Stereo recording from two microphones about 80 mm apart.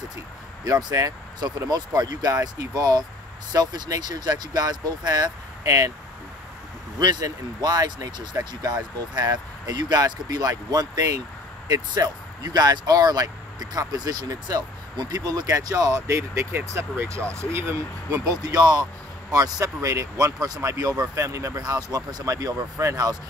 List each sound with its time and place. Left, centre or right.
0.7 s speech: right
0.9 s speech: right
1.7 s speech: right
7.0 s speech: right
15.5 s speech: right
21.5 s speech: right